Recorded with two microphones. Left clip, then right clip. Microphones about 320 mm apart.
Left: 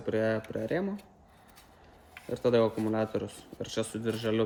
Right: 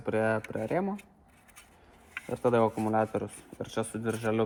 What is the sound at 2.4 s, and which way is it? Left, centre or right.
Speech, centre.